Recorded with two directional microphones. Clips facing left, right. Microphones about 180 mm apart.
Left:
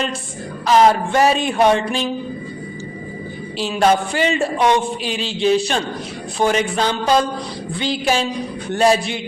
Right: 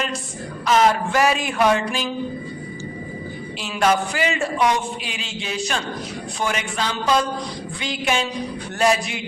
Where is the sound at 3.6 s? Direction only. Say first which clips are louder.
Left 4 dB; 30° left (ahead or behind).